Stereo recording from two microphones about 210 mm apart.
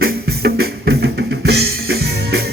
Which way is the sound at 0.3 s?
50° right (ahead or behind).